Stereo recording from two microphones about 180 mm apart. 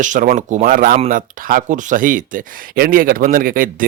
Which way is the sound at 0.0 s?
45° right (ahead or behind).